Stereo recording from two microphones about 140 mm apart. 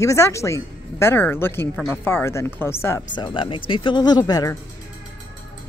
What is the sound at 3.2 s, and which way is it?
Speech, 35° left (ahead or behind).